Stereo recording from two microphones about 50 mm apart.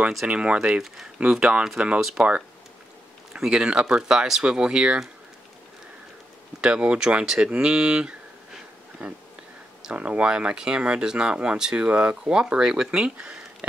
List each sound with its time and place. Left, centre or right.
0.3 s speech: right
2.0 s speech: centre
3.3 s speech: centre
6.6 s speech: right